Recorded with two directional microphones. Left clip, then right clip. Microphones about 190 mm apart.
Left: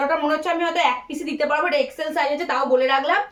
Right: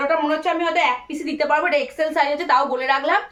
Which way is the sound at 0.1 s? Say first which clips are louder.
Right 1 dB; 15° right (ahead or behind).